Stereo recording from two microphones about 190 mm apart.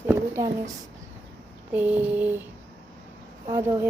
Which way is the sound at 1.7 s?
10° right (ahead or behind).